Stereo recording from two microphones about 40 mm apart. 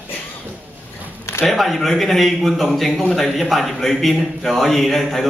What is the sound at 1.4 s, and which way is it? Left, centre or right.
A man's voice, centre.